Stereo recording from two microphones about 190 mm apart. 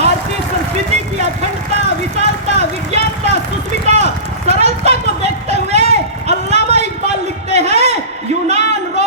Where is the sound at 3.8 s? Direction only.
35° right (ahead or behind).